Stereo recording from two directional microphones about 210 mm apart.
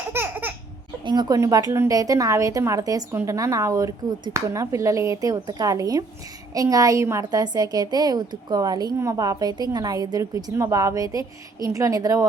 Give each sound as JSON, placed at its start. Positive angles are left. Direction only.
{"t": 0.1, "sound": "laughter", "side_deg": -10}
{"t": 1.0, "sound": "a woman's voice", "side_deg": -20}